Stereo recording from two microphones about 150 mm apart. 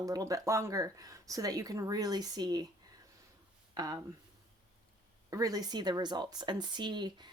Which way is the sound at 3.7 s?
25° right (ahead or behind).